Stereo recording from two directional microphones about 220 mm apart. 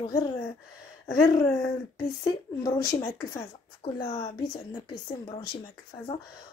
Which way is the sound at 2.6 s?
15° left (ahead or behind).